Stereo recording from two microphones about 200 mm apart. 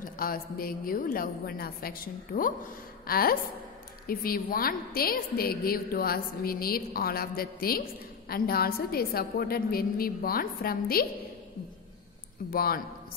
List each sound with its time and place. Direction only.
0.0 s a woman's voice: 45° left (ahead or behind)
12.4 s a woman's voice: 45° left (ahead or behind)